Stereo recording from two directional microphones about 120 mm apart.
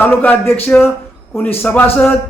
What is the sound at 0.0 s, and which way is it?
Speech, 15° left (ahead or behind).